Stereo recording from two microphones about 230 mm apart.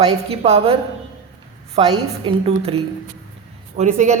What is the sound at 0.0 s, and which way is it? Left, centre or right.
Speech, right.